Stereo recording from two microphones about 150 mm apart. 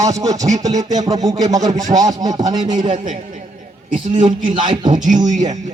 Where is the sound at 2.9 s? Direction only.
60° right (ahead or behind).